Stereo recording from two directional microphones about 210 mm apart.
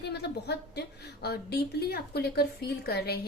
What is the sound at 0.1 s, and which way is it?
A woman's voice, 50° left (ahead or behind).